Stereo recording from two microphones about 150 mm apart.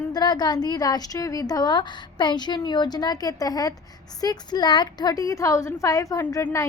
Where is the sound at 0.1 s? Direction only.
30° left (ahead or behind).